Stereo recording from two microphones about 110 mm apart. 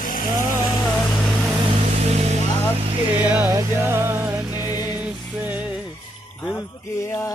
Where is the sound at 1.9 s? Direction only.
80° right.